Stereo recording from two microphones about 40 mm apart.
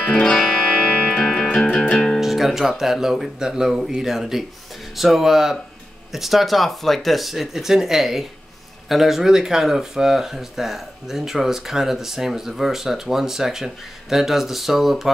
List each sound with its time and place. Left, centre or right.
0.0 s music: centre
0.4 s music: centre
1.6 s music: centre
2.1 s music: centre
2.8 s speech: centre